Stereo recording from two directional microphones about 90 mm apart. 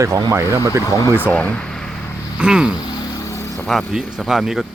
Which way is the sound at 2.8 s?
50° left (ahead or behind).